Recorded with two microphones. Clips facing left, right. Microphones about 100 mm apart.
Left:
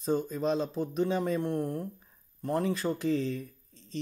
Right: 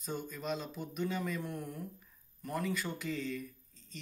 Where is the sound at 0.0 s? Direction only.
35° left (ahead or behind).